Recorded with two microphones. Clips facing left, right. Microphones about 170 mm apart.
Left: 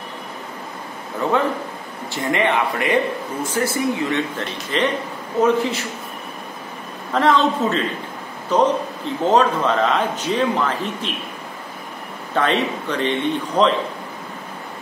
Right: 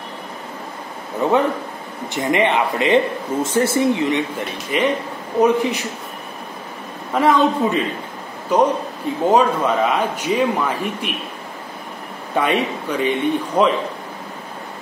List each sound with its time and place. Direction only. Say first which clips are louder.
1.2 s speech: right 3 dB; 20° right (ahead or behind)
7.2 s speech: right 1 dB; 10° right (ahead or behind)
12.4 s speech: right 1 dB; 10° right (ahead or behind)